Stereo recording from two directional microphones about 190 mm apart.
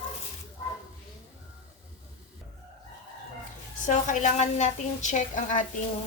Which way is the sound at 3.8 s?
40° left (ahead or behind).